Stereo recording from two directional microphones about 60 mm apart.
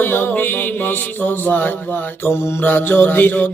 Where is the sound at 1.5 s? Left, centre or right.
Left.